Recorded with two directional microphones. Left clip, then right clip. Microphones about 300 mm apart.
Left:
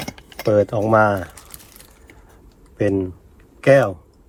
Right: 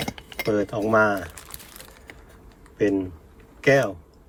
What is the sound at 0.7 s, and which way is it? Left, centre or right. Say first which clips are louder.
Speech: left 4 dB; left.